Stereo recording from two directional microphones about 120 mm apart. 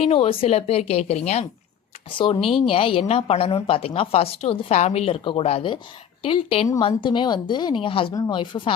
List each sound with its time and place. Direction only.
0.0 s a woman's voice: 55° left (ahead or behind)
2.0 s a woman's voice: 45° left (ahead or behind)
6.2 s a woman's voice: 45° left (ahead or behind)